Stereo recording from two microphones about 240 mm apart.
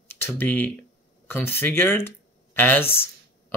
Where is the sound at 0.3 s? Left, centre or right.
Centre.